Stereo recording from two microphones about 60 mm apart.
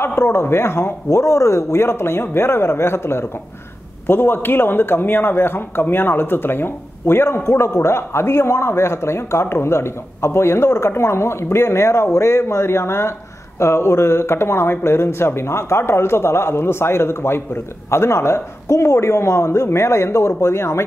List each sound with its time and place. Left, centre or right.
0.0 s speech: left
1.1 s speech: left